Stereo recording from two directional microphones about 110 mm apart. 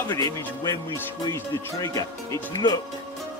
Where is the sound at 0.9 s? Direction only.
30° left (ahead or behind).